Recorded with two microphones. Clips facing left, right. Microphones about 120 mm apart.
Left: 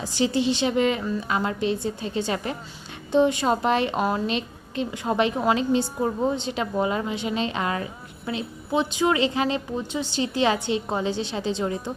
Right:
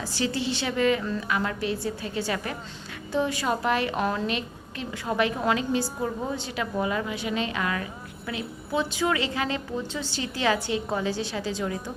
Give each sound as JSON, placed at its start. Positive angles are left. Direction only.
{"t": 0.0, "sound": "a woman's voice", "side_deg": 20}